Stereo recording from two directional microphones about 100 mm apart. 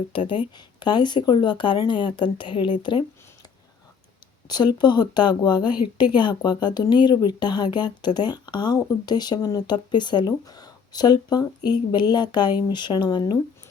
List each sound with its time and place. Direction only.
0.1 s speech: 55° left (ahead or behind)
4.4 s speech: 45° left (ahead or behind)